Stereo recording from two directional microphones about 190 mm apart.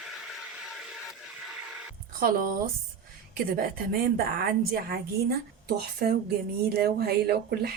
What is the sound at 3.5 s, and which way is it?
A woman's voice, 50° right (ahead or behind).